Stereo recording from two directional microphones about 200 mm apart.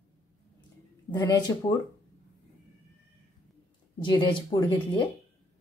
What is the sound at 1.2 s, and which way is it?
Speech, 20° left (ahead or behind).